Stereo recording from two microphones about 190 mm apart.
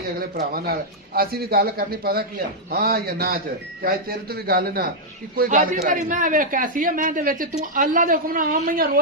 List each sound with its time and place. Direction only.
0.2 s speech: 50° right (ahead or behind)